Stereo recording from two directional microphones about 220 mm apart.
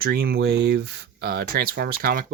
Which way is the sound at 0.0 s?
45° right (ahead or behind).